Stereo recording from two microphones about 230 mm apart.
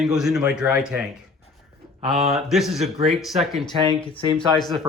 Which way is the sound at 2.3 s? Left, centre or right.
Centre.